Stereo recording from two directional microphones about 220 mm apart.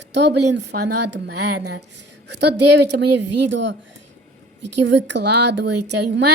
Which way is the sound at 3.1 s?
90° right.